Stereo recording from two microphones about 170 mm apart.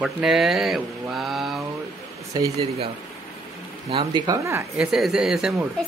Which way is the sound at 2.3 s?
20° right (ahead or behind).